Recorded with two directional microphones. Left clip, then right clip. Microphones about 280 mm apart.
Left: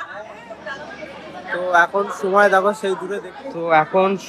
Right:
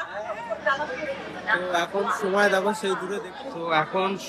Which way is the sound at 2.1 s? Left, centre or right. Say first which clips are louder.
Left 7 dB; centre.